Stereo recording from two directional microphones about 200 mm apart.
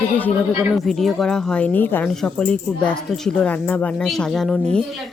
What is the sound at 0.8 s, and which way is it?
Speech, centre (ahead or behind).